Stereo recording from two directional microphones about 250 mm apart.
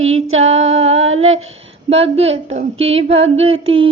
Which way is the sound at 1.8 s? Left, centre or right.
Right.